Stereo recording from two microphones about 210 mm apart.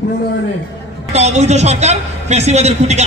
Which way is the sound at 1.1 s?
30° right (ahead or behind).